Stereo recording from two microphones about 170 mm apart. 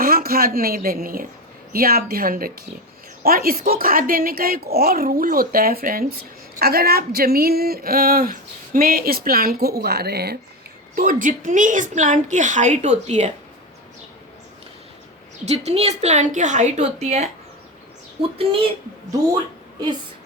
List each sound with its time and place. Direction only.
0.0 s speech: 60° right (ahead or behind)
10.9 s a woman's voice: 55° right (ahead or behind)
15.4 s a woman's voice: 40° right (ahead or behind)